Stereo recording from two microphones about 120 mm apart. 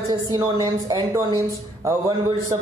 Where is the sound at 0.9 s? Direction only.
30° right (ahead or behind).